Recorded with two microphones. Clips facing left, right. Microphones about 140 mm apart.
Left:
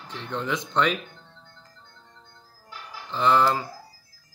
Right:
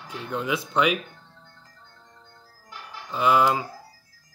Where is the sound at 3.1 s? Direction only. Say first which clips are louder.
Right 1 dB; 10° right (ahead or behind).